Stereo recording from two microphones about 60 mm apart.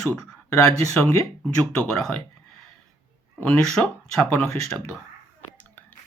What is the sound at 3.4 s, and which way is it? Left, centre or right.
Speech, centre.